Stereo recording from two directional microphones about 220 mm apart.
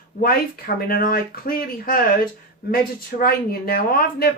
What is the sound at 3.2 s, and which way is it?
Speech, 40° left (ahead or behind).